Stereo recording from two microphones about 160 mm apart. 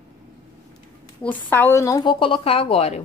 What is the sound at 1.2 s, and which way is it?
A woman's voice, 10° left (ahead or behind).